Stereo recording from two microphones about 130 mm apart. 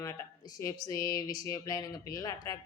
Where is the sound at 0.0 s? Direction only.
25° left (ahead or behind).